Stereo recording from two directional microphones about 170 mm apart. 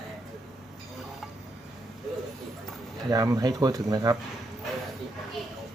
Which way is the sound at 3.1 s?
20° right (ahead or behind).